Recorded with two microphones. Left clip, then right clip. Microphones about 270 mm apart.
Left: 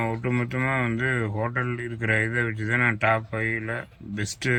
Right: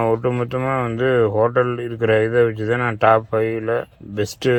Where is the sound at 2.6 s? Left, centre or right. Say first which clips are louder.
Right 3 dB; centre.